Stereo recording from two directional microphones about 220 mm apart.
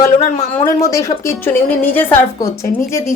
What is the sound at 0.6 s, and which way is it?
A woman's voice, 15° left (ahead or behind).